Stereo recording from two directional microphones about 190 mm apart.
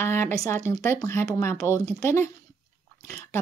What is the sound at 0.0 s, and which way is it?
Speech, 10° left (ahead or behind).